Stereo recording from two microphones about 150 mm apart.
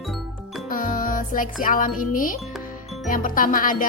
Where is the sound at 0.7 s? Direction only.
65° left (ahead or behind).